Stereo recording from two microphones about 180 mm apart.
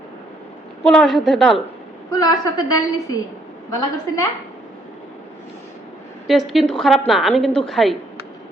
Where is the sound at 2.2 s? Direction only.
20° left (ahead or behind).